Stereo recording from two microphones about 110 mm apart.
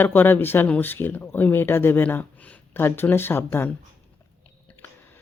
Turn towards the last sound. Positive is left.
turn(degrees=20)  # may be behind; listen again after turning